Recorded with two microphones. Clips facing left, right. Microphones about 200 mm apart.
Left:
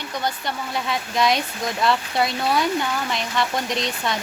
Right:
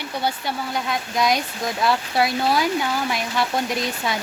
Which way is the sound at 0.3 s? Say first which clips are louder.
Right 2 dB; centre (ahead or behind).